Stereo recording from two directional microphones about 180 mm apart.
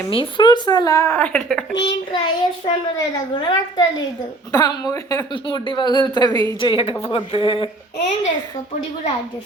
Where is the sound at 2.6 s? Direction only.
25° left (ahead or behind).